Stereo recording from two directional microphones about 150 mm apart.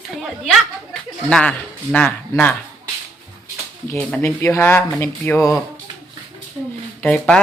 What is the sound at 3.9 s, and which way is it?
Speech, 15° left (ahead or behind).